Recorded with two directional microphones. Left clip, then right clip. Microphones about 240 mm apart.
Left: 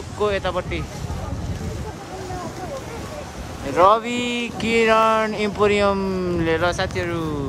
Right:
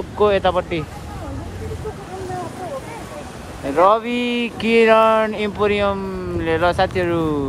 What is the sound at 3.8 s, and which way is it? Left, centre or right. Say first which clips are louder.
Speech: right 1 dB; centre.